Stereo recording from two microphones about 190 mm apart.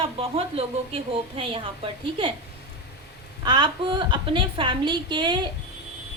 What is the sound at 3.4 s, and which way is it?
A woman's voice, 25° right (ahead or behind).